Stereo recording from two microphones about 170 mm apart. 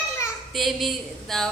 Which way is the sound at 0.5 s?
Centre (ahead or behind).